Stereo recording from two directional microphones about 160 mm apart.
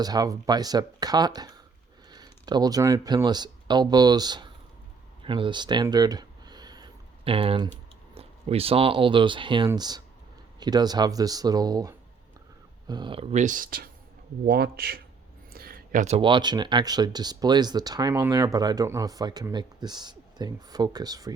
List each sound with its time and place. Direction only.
0.0 s speech: 25° right (ahead or behind)
5.2 s a sound: 30° right (ahead or behind)
8.1 s speech: 40° right (ahead or behind)
13.3 s speech: 50° right (ahead or behind)
14.4 s speech: 80° right
15.5 s a sound: 70° right (ahead or behind); by 16.2 s 50° right (ahead or behind)
16.2 s speech: 30° right (ahead or behind)